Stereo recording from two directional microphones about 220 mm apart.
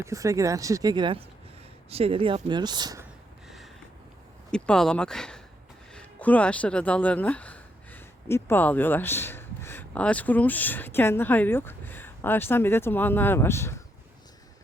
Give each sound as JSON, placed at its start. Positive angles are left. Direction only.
{"t": 0.0, "sound": "speech", "side_deg": -15}
{"t": 4.5, "sound": "speech", "side_deg": 5}